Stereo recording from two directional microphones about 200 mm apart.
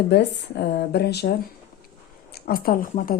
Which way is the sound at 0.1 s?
55° left (ahead or behind).